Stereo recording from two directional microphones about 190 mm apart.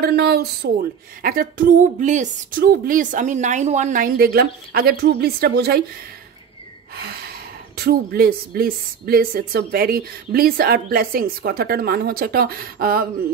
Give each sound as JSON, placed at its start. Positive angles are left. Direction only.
{"t": 0.0, "sound": "speech", "side_deg": -55}
{"t": 7.7, "sound": "speech", "side_deg": -55}